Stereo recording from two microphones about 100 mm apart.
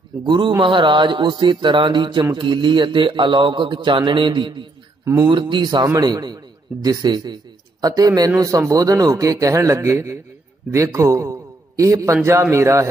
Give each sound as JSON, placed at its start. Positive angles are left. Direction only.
{"t": 0.2, "sound": "a man's voice", "side_deg": -50}